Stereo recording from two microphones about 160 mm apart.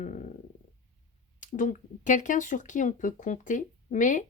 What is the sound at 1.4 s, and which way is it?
Speech, 55° left (ahead or behind).